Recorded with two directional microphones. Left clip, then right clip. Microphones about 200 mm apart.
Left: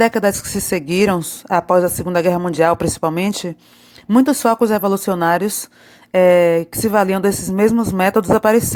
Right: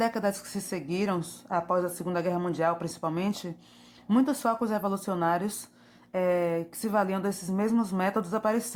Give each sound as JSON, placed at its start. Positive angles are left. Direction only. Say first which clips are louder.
{"t": 0.0, "sound": "speech", "louder": "left 13 dB", "side_deg": 35}